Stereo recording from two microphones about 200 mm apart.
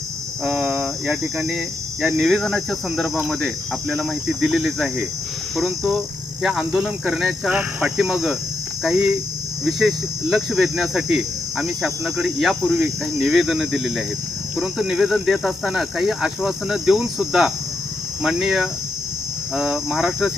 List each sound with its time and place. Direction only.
0.4 s speech: centre (ahead or behind)